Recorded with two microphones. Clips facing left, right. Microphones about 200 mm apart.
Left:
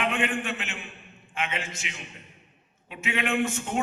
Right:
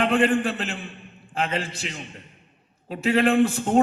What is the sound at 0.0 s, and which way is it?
A man's voice, 35° right (ahead or behind).